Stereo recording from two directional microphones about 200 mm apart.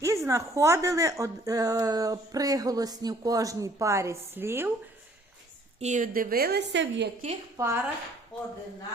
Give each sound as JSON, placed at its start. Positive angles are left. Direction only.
{"t": 0.0, "sound": "a woman's voice", "side_deg": -15}
{"t": 5.8, "sound": "a woman's voice", "side_deg": -40}
{"t": 7.5, "sound": "a woman's voice", "side_deg": -15}